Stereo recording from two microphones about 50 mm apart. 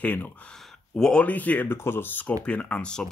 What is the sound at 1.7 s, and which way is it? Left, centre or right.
Speech, left.